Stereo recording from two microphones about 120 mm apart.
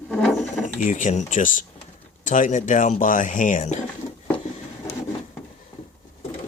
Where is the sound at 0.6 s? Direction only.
90° left.